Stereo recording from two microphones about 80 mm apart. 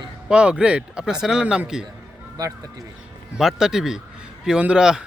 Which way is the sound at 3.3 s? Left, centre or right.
Centre.